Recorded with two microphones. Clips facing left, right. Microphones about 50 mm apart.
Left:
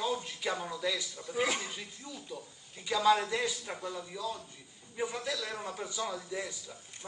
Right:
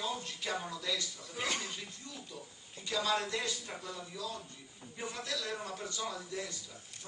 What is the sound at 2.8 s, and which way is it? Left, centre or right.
A man's voice, centre.